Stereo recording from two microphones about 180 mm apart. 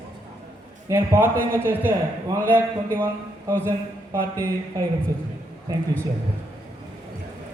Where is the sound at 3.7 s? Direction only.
15° right (ahead or behind).